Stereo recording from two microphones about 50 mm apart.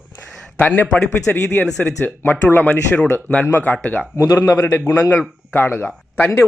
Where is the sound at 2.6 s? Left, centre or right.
Left.